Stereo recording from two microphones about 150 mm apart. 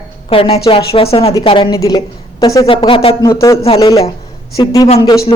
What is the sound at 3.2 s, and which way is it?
Speech, 20° left (ahead or behind).